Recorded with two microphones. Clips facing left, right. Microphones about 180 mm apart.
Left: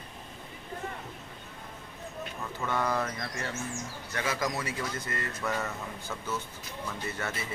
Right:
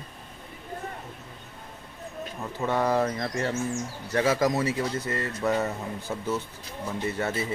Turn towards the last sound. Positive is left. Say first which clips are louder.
# right 7 dB
turn(degrees=-25)  # may be behind; listen again after turning